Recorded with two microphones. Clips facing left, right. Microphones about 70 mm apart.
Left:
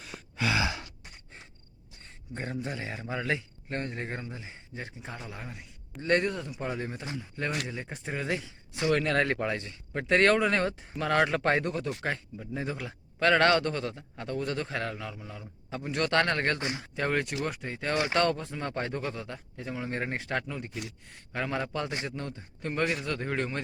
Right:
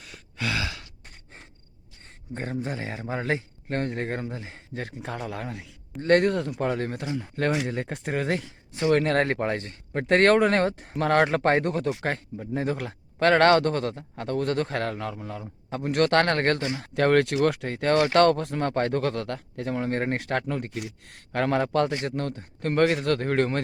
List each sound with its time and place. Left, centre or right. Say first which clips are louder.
0.0 s sigh: even; centre
0.6 s sigh: left 2 dB; left
2.0 s speech: right 4 dB; right
6.0 s speech: right 7 dB; right
8.8 s speech: right 4 dB; right
16.9 s speech: right 10 dB; right